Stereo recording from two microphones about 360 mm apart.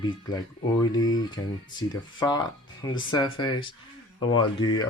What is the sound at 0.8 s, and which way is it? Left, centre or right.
Speech, centre.